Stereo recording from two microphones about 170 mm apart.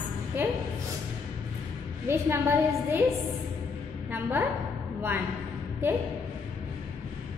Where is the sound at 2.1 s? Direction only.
15° right (ahead or behind).